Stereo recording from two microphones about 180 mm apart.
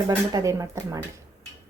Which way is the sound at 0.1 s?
20° right (ahead or behind).